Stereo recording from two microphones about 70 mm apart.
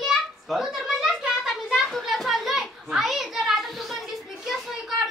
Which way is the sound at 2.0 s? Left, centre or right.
Centre.